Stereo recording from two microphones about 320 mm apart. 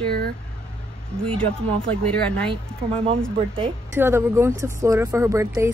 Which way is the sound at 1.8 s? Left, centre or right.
Centre.